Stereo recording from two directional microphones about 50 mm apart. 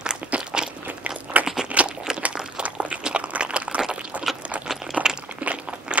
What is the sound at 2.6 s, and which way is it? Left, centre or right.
Walk, right.